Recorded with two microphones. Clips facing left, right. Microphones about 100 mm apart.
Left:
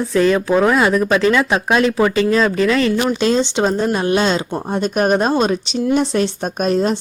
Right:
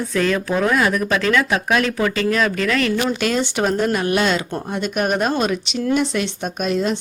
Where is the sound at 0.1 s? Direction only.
25° left (ahead or behind).